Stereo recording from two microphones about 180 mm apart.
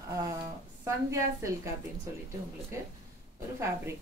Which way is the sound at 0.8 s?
15° right (ahead or behind).